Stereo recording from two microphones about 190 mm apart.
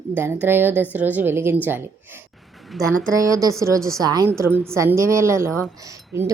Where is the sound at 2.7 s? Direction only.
5° left (ahead or behind).